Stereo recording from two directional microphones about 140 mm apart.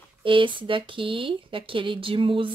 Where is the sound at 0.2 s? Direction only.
35° right (ahead or behind).